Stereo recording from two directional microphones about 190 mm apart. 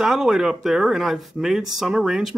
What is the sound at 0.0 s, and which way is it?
Speech, centre (ahead or behind).